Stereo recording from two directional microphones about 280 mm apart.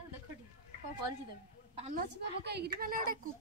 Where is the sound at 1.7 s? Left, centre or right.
Right.